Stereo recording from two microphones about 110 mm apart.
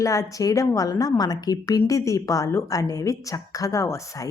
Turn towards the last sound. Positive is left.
turn(degrees=30)  # may be behind; listen again after turning